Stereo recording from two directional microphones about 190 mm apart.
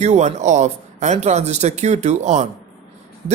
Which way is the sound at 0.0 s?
35° right (ahead or behind).